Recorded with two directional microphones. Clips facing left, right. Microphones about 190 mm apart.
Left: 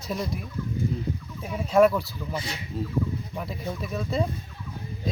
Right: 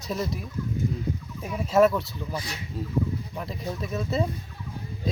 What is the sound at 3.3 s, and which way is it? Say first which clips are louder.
Speech: even; centre (ahead or behind).